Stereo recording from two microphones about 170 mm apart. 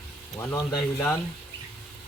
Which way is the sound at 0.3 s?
20° left (ahead or behind).